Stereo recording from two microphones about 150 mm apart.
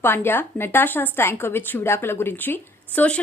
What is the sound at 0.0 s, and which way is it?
Speech, 15° left (ahead or behind).